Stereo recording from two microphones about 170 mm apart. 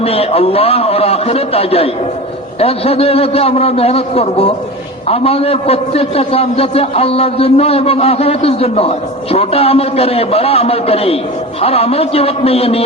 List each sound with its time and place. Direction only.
0.0 s a man's voice: 35° left (ahead or behind)